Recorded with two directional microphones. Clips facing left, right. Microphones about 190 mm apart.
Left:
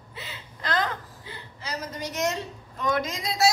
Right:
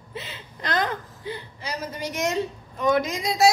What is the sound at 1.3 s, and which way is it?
A woman's voice, 15° right (ahead or behind).